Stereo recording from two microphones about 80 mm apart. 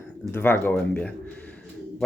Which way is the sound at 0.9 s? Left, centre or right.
Centre.